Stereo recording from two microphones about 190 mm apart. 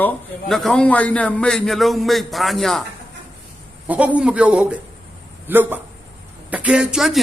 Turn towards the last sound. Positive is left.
turn(degrees=0)  # may be behind; listen again after turning